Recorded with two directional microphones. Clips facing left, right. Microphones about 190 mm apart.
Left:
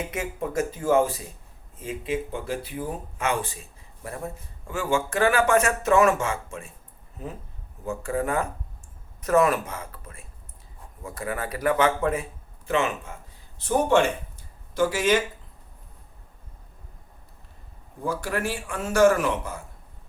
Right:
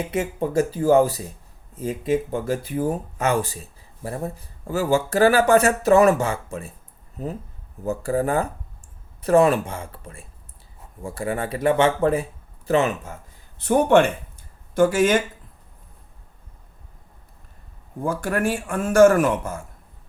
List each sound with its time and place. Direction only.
0.1 s speech: 30° right (ahead or behind)
7.9 s speech: 35° right (ahead or behind)
13.6 s a man's voice: 60° right (ahead or behind)
18.0 s a man's voice: 50° right (ahead or behind)